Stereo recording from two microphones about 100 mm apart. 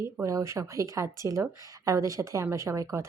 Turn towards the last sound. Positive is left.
turn(degrees=-30)  # may be behind; listen again after turning